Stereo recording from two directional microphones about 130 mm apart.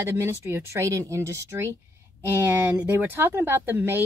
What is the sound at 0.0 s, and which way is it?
Speech, 20° right (ahead or behind).